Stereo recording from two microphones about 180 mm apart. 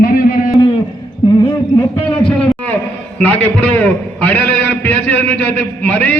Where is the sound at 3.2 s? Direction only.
10° left (ahead or behind).